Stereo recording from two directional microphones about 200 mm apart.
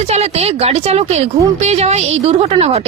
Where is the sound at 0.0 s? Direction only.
30° right (ahead or behind).